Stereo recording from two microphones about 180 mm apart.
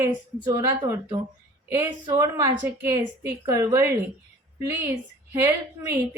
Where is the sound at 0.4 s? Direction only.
25° right (ahead or behind).